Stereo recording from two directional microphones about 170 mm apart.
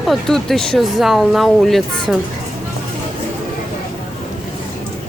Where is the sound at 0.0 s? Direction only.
Centre (ahead or behind).